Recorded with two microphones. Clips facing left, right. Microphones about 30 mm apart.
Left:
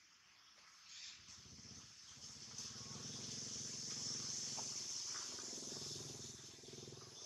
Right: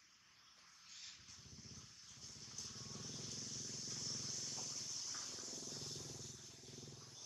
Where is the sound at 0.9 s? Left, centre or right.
Centre.